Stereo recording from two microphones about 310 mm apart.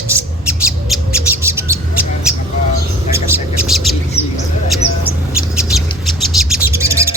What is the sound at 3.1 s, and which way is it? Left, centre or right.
Bird, centre.